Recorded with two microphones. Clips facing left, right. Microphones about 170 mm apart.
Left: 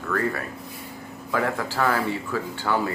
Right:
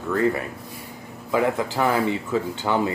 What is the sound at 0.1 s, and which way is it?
Speech, 20° right (ahead or behind).